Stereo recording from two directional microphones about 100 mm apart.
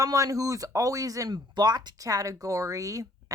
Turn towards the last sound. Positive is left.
turn(degrees=-35)  # may be behind; listen again after turning